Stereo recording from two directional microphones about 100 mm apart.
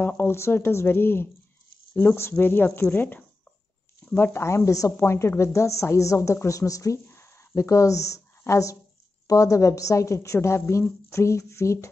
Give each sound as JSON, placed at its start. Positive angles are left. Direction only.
{"t": 0.2, "sound": "a woman's voice", "side_deg": 25}